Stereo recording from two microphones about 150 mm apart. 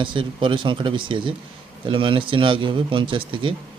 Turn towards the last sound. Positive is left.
turn(degrees=-35)  # may be behind; listen again after turning